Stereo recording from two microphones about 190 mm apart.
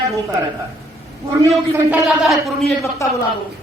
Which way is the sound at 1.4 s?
15° right (ahead or behind).